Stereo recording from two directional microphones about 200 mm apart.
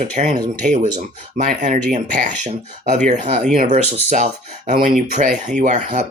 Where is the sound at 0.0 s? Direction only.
35° right (ahead or behind).